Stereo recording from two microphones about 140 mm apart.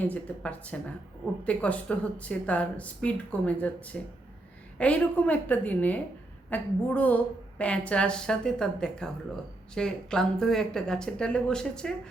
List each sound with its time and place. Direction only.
0.0 s speech: 10° left (ahead or behind)